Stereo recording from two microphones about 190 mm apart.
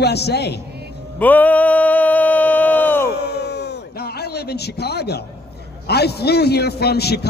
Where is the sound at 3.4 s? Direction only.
60° left (ahead or behind).